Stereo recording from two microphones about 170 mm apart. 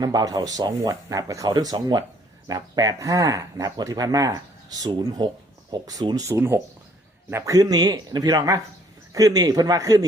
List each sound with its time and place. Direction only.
0.0 s speech: 20° right (ahead or behind)